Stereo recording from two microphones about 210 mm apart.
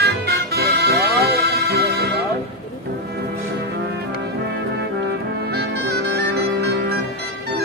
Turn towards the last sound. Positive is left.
turn(degrees=-50)  # may be behind; listen again after turning